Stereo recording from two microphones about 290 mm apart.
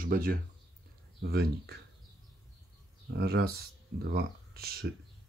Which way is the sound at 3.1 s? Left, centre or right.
Right.